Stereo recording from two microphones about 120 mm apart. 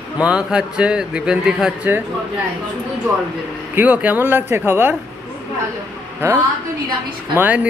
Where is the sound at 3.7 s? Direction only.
15° right (ahead or behind).